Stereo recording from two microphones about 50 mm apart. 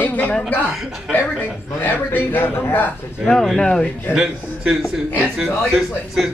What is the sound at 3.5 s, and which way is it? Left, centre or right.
Speech, centre.